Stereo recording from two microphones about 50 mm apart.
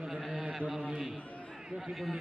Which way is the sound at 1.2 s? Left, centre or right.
Left.